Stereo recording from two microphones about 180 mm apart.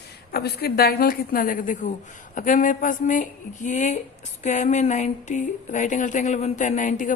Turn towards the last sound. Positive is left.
turn(degrees=45)  # may be behind; listen again after turning